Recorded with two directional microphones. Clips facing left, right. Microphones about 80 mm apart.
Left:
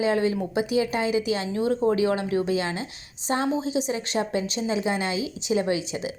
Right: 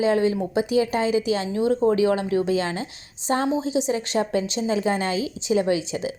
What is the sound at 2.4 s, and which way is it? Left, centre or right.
Speech, right.